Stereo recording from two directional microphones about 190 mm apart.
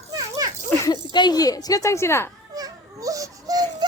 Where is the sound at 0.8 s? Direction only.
20° left (ahead or behind).